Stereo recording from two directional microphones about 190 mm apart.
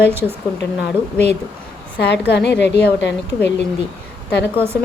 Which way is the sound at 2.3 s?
65° left (ahead or behind).